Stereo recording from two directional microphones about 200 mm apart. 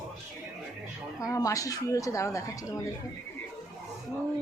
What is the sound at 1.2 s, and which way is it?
A woman's voice, 15° left (ahead or behind).